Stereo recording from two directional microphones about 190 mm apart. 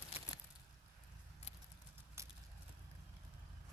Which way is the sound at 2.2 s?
15° right (ahead or behind).